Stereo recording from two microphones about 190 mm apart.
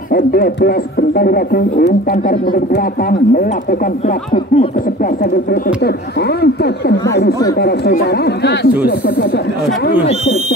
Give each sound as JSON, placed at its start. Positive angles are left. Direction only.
{"t": 0.1, "sound": "speech", "side_deg": 55}
{"t": 6.4, "sound": "speech", "side_deg": 60}